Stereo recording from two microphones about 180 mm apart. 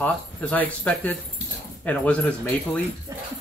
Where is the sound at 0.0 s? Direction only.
10° left (ahead or behind).